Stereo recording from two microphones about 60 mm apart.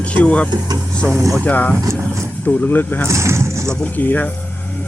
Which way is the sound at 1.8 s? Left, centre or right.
Right.